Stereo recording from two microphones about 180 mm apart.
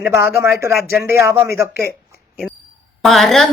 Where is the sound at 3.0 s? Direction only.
Centre (ahead or behind).